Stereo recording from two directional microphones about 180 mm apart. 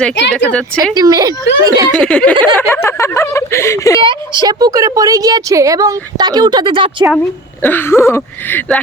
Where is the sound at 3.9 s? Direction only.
25° right (ahead or behind).